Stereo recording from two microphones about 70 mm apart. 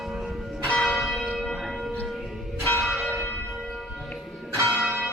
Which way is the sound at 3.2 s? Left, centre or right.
Left.